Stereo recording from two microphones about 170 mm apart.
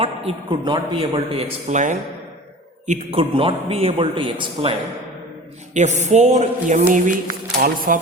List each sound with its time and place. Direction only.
0.0 s speech: 30° right (ahead or behind)
5.7 s speech: 45° right (ahead or behind)